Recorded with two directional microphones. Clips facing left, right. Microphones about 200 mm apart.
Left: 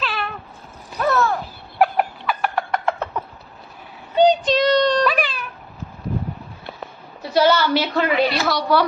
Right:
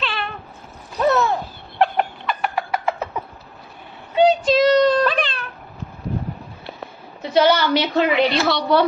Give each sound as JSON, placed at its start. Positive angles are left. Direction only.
{"t": 0.0, "sound": "cat", "side_deg": 0}
{"t": 0.9, "sound": "a sound", "side_deg": -20}
{"t": 1.8, "sound": "fowl", "side_deg": 5}
{"t": 4.3, "sound": "child singing", "side_deg": -5}
{"t": 5.0, "sound": "cat", "side_deg": 10}
{"t": 7.2, "sound": "a woman's voice", "side_deg": -20}